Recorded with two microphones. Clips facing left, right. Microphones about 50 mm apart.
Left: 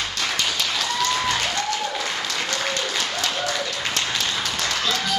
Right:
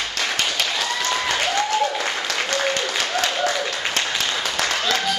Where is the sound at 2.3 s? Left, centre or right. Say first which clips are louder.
Right 3 dB; right.